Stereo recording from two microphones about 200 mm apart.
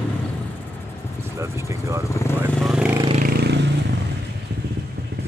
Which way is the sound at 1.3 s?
15° right (ahead or behind).